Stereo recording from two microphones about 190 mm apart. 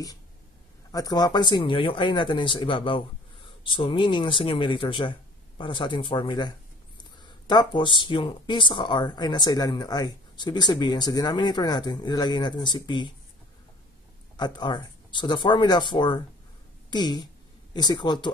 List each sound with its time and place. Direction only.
0.9 s speech: 20° left (ahead or behind)
14.3 s speech: 25° left (ahead or behind)